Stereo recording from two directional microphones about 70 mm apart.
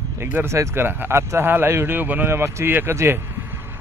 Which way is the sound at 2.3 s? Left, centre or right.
Right.